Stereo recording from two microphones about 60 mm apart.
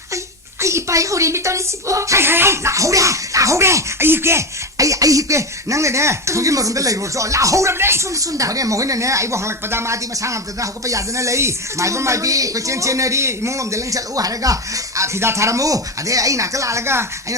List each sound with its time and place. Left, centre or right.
0.6 s speech: right
2.2 s speech: right
4.0 s speech: right
4.8 s speech: right
7.7 s speech: right
8.1 s speech: right